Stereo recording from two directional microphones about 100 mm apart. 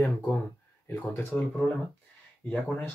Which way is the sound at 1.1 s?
25° left (ahead or behind).